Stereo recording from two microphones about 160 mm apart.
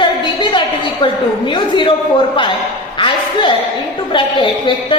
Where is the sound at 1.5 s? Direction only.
30° left (ahead or behind).